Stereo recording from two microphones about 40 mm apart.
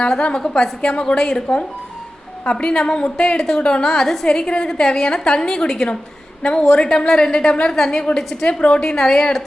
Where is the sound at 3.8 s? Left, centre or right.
Centre.